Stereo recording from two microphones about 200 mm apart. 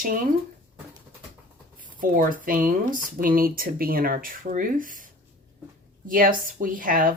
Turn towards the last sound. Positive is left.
turn(degrees=-45)  # may be behind; listen again after turning